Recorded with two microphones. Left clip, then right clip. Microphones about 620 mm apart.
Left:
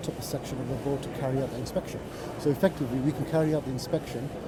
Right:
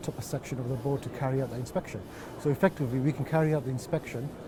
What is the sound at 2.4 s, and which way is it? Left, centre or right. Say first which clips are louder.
Speech: left 1 dB; right.